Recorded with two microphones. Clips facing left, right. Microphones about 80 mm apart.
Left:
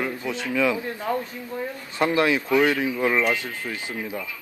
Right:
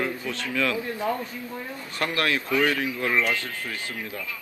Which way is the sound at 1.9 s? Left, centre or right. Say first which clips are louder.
Left 5 dB; centre.